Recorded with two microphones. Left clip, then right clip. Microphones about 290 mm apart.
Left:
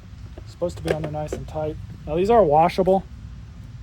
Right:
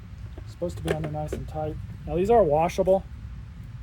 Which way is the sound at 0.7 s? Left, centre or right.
Centre.